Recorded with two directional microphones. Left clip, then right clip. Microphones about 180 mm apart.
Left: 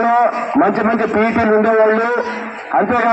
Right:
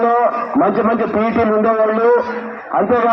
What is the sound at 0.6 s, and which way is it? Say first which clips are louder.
A man's voice: even; 25° right (ahead or behind).